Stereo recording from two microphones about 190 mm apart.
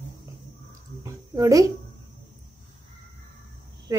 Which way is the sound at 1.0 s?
15° right (ahead or behind).